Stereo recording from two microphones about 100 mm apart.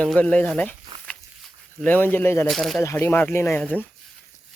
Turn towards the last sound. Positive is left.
turn(degrees=15)  # may be behind; listen again after turning